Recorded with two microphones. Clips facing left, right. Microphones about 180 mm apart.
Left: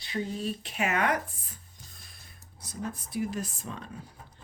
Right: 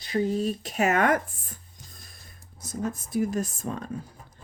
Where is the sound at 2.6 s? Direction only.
45° right (ahead or behind).